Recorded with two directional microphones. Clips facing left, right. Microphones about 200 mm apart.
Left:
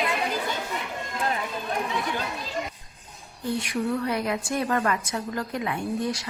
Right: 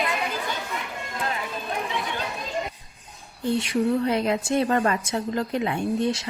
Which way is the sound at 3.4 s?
25° right (ahead or behind).